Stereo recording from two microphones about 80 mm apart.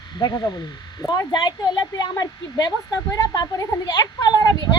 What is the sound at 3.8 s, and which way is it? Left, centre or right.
Speech, left.